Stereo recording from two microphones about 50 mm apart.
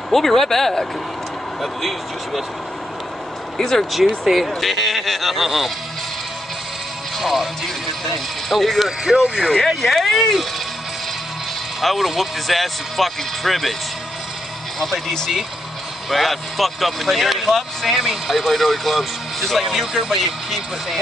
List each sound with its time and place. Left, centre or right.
0.1 s speech: centre
3.5 s speech: centre
7.2 s music: centre
8.5 s speech: centre
9.0 s speech: centre
9.7 s speech: centre
11.8 s speech: centre
14.8 s speech: centre